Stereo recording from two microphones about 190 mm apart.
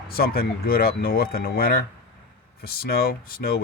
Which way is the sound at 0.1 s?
55° left (ahead or behind).